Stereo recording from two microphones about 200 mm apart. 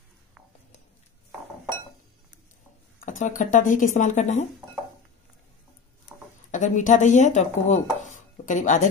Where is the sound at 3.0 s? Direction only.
40° left (ahead or behind).